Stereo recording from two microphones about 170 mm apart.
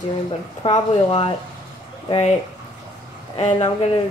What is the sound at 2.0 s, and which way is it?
Speech, 35° left (ahead or behind).